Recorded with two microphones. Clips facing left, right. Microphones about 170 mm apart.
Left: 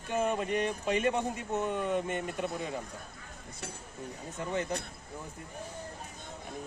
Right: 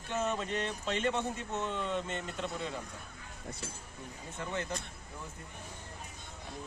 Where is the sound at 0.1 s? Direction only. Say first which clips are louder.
Left 4 dB; 10° left (ahead or behind).